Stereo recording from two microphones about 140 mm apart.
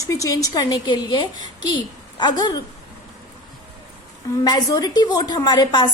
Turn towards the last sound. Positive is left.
turn(degrees=30)  # may be behind; listen again after turning